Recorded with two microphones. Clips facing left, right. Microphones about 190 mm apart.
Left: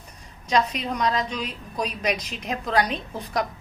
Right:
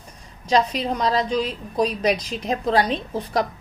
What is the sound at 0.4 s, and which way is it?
A woman's voice, 30° right (ahead or behind).